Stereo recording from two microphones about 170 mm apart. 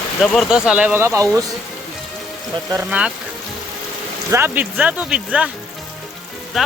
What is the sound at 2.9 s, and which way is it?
Speech, 5° right (ahead or behind).